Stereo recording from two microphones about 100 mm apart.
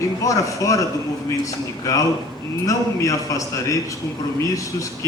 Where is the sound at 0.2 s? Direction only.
35° left (ahead or behind).